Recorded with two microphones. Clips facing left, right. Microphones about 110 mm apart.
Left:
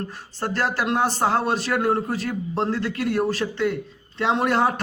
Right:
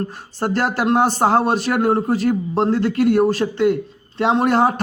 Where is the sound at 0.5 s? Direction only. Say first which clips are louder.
Right 5 dB; 50° right (ahead or behind).